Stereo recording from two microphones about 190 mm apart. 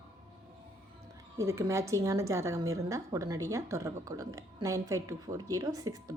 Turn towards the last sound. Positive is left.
turn(degrees=-15)  # may be behind; listen again after turning